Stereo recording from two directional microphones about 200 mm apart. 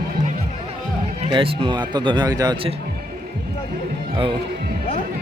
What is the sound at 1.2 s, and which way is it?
Speech, 25° right (ahead or behind).